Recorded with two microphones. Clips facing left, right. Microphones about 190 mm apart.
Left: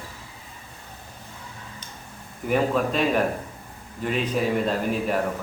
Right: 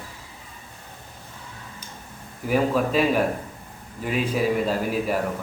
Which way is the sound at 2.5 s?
5° right (ahead or behind).